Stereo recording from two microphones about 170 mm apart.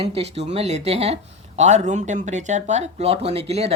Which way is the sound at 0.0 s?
35° right (ahead or behind).